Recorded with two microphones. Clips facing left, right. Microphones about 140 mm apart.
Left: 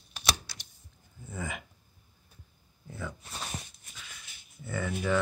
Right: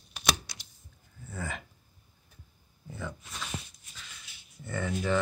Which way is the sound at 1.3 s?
15° left (ahead or behind).